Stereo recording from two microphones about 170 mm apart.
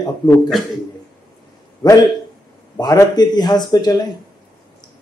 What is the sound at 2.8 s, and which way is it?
Speech, 25° left (ahead or behind).